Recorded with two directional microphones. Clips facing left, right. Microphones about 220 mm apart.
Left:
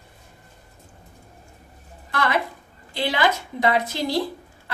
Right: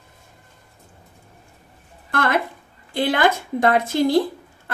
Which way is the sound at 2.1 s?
50° right (ahead or behind).